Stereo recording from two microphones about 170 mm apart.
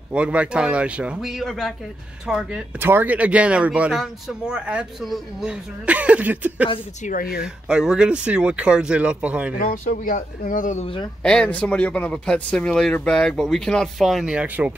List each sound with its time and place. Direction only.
0.1 s speech: 5° right (ahead or behind)
7.0 s speech: 55° left (ahead or behind)
7.4 s speech: 5° right (ahead or behind)
9.7 s speech: 55° left (ahead or behind)
11.2 s speech: 5° left (ahead or behind)